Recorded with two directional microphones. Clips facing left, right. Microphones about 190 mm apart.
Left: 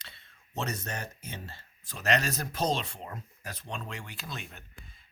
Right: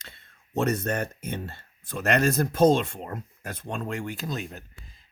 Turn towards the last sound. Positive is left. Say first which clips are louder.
# right 10 dB
turn(degrees=-40)  # may be behind; listen again after turning